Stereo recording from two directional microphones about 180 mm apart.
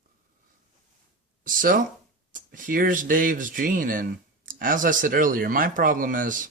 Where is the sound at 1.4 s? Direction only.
50° right (ahead or behind).